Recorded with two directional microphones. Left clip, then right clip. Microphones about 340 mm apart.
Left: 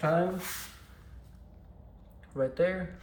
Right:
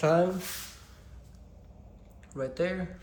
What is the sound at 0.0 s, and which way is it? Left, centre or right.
Speech, centre.